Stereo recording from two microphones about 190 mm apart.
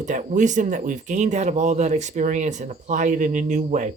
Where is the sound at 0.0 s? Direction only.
40° right (ahead or behind).